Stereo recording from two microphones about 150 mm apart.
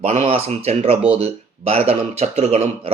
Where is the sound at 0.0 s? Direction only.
50° right (ahead or behind).